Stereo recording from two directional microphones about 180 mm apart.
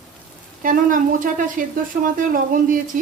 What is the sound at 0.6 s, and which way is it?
Speech, 50° right (ahead or behind).